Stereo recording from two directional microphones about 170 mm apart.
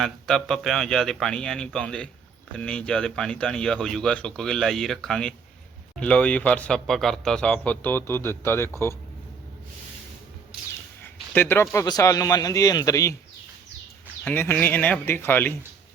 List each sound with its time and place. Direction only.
0.0 s speech: centre (ahead or behind)
11.0 s a man's voice: 10° left (ahead or behind)
14.3 s speech: 10° left (ahead or behind)